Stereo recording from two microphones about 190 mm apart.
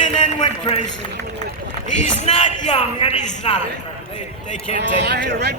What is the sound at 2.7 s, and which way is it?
Speech, 30° left (ahead or behind).